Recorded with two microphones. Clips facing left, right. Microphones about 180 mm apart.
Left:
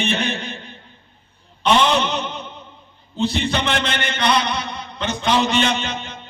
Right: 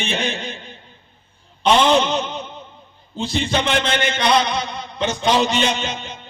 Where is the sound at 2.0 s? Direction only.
60° left (ahead or behind).